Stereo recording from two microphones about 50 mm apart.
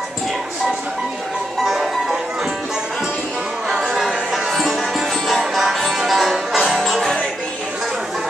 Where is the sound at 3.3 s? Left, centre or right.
Centre.